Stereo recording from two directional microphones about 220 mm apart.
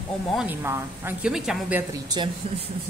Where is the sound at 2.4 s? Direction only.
25° right (ahead or behind).